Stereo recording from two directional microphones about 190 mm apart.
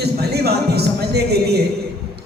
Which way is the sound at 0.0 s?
60° right (ahead or behind).